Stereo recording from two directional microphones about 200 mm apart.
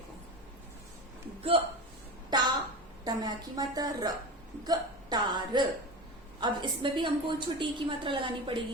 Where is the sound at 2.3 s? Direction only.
20° right (ahead or behind).